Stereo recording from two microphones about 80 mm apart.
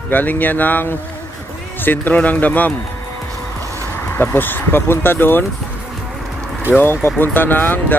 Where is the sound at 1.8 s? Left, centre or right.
Left.